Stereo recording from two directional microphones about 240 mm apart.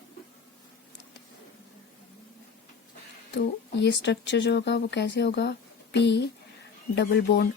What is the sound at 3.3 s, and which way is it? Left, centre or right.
Speech, left.